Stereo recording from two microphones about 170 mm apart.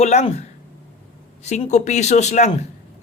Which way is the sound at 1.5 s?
45° left (ahead or behind).